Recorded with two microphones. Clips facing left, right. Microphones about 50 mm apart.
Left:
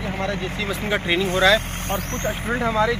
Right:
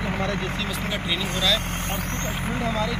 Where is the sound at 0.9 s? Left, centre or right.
Left.